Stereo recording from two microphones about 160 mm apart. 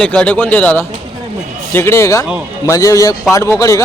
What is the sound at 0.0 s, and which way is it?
A man's voice, 5° left (ahead or behind).